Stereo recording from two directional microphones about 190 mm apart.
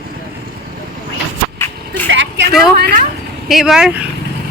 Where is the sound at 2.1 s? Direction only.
75° right (ahead or behind).